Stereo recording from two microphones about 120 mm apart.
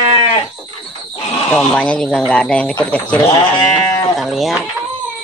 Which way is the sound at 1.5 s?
5° left (ahead or behind).